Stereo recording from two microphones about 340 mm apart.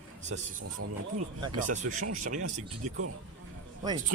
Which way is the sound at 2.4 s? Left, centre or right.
Right.